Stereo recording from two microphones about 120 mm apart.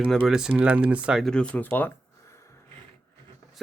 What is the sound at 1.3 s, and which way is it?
Speech, 10° left (ahead or behind).